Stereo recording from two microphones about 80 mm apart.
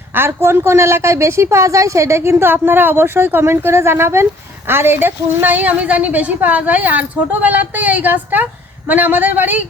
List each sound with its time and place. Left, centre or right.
0.1 s a woman's voice: right